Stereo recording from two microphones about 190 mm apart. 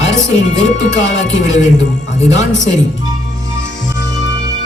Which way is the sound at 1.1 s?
75° left (ahead or behind).